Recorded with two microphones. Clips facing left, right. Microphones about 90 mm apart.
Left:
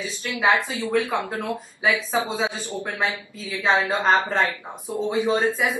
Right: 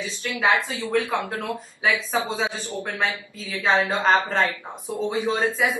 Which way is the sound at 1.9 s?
15° left (ahead or behind).